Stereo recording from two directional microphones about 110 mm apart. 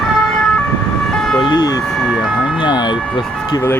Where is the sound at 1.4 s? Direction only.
40° left (ahead or behind).